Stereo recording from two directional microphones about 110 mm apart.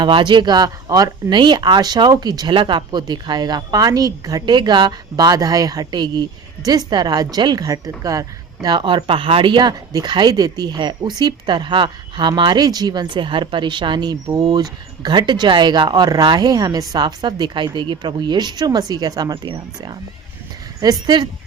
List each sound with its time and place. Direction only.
0.0 s speech: 45° right (ahead or behind)